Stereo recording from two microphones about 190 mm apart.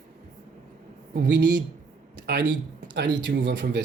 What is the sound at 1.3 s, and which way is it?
Speech, 70° right (ahead or behind).